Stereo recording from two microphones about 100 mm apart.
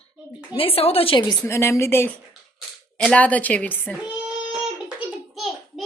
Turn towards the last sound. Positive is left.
turn(degrees=0)  # may be behind; listen again after turning